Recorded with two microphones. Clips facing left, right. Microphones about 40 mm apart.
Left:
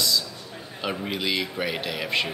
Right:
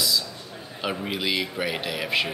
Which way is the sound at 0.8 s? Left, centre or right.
Centre.